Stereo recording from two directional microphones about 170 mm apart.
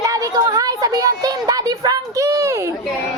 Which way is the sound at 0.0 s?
20° right (ahead or behind).